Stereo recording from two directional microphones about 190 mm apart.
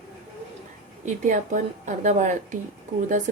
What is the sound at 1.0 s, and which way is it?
A woman's voice, 40° right (ahead or behind).